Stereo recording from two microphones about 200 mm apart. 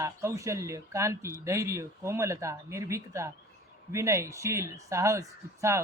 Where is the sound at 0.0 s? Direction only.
15° right (ahead or behind).